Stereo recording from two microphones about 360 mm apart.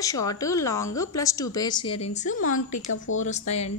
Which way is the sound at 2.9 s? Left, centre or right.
Left.